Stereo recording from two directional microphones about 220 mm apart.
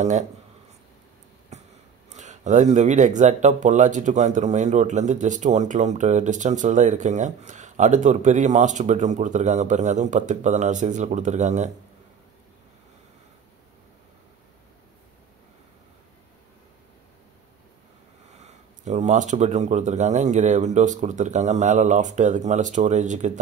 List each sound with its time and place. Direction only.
1.5 s a sound: 30° right (ahead or behind)
2.0 s speech: 30° right (ahead or behind)
18.4 s speech: 30° right (ahead or behind)